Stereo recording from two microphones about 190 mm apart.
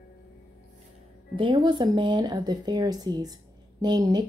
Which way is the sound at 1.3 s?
25° right (ahead or behind).